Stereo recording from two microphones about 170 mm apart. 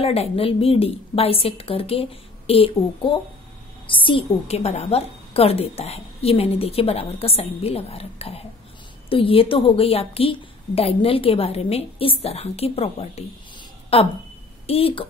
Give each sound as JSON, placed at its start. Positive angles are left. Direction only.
{"t": 0.0, "sound": "a woman's voice", "side_deg": 35}